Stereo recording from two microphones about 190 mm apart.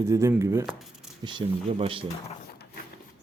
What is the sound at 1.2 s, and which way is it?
Speech, 25° right (ahead or behind).